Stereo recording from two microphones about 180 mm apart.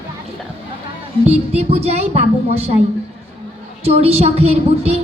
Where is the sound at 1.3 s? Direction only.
35° right (ahead or behind).